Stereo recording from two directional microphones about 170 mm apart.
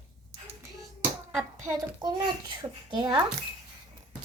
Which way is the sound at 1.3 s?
15° right (ahead or behind).